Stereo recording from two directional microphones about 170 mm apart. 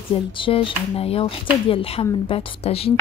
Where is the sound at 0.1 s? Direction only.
30° left (ahead or behind).